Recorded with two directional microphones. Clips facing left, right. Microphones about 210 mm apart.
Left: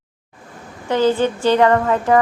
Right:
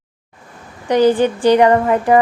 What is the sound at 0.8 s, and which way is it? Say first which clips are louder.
A woman's voice: right 4 dB; 15° right (ahead or behind).